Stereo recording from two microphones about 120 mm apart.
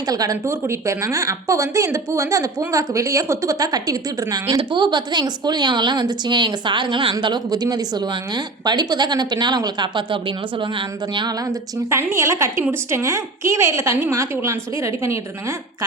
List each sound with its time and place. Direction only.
0.1 s a woman's voice: 30° right (ahead or behind)
11.9 s speech: 25° right (ahead or behind)